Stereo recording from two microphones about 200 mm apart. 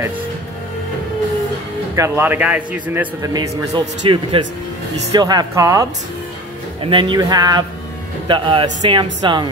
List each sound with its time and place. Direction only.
2.0 s speech: 10° right (ahead or behind)